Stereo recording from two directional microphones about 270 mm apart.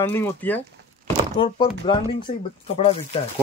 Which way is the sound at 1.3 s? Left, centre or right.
Centre.